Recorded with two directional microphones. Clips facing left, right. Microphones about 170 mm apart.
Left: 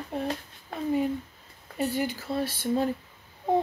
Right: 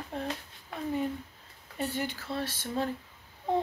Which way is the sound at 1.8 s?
10° left (ahead or behind).